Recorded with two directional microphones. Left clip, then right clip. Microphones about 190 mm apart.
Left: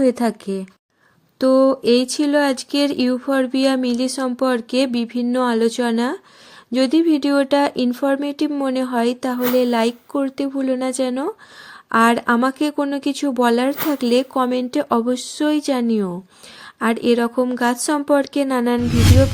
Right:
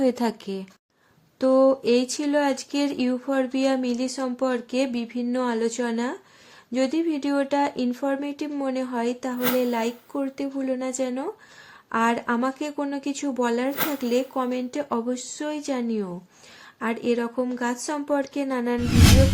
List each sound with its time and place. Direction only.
0.0 s a woman's voice: 20° left (ahead or behind); by 18.8 s 35° left (ahead or behind)